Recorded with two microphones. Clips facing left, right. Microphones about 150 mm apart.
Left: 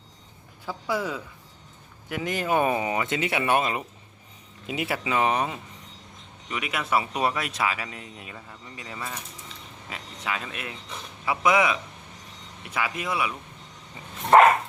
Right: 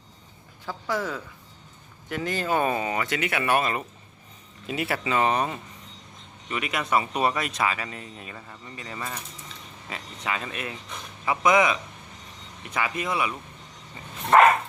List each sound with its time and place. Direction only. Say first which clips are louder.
0.6 s speech: even; 10° left (ahead or behind)